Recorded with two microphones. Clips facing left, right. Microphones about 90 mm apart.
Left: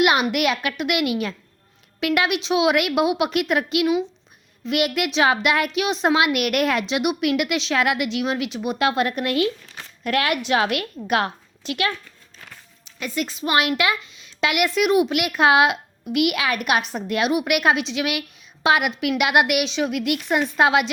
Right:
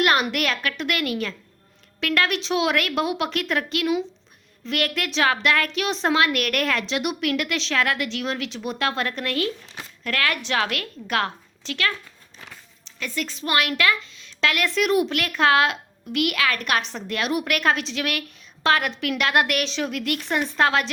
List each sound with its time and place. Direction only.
0.0 s a woman's voice: 10° left (ahead or behind)